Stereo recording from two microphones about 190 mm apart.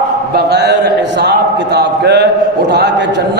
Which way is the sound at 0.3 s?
60° right (ahead or behind).